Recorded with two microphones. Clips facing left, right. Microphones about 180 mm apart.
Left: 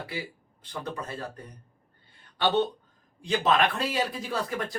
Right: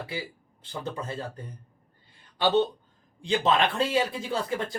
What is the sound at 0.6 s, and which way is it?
Speech, 25° right (ahead or behind).